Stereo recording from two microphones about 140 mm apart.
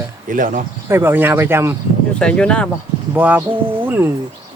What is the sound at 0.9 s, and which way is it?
Speech, 15° right (ahead or behind).